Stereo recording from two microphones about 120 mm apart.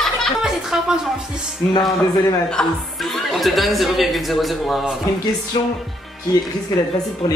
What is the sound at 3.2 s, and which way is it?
A man's voice, centre (ahead or behind).